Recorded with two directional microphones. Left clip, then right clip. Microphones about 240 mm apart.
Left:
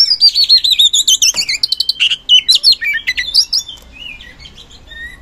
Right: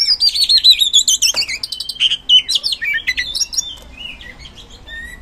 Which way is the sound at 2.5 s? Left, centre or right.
Left.